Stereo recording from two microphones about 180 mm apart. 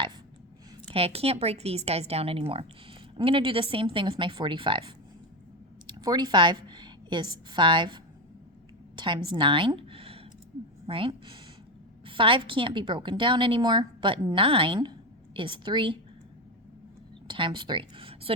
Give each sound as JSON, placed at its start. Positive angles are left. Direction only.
{"t": 0.9, "sound": "a woman's voice", "side_deg": -35}
{"t": 6.0, "sound": "a woman's voice", "side_deg": -20}
{"t": 9.0, "sound": "a sound", "side_deg": -25}
{"t": 10.8, "sound": "a woman's voice", "side_deg": -30}
{"t": 17.2, "sound": "speech", "side_deg": -25}